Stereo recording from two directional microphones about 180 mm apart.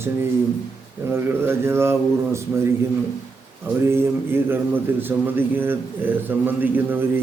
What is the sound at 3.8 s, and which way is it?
A man's voice, 15° right (ahead or behind).